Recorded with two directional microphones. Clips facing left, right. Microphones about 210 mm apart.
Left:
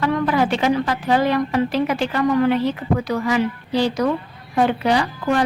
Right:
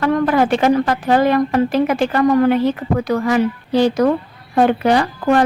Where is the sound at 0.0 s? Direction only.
50° right (ahead or behind).